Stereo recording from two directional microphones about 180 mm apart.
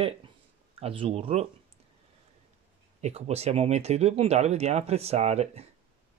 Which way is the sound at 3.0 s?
35° right (ahead or behind).